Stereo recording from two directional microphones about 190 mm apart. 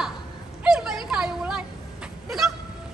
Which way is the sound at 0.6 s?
Centre (ahead or behind).